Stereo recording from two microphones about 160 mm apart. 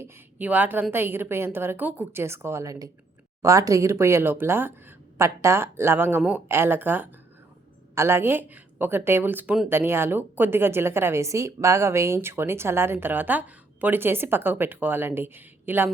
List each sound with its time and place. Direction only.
0.0 s speech: 10° right (ahead or behind)